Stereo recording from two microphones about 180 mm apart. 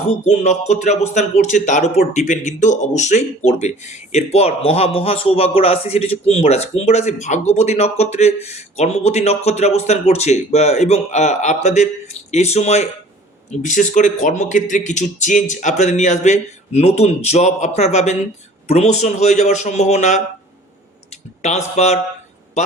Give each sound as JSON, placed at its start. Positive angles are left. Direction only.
{"t": 0.3, "sound": "speech", "side_deg": 40}
{"t": 21.8, "sound": "speech", "side_deg": 40}